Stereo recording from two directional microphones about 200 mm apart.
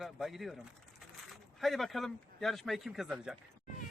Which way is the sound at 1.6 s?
Centre (ahead or behind).